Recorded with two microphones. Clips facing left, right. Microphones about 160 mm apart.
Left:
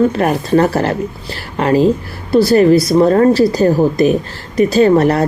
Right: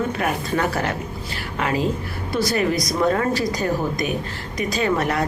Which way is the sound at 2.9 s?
35° left (ahead or behind).